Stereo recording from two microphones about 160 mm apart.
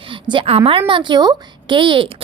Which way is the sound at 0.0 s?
30° right (ahead or behind).